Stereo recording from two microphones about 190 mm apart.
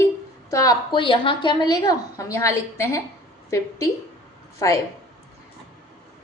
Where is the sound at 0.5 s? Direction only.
20° left (ahead or behind).